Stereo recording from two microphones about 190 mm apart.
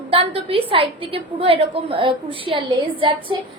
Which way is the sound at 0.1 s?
30° right (ahead or behind).